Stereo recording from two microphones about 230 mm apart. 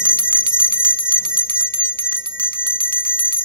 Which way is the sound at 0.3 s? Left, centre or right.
Centre.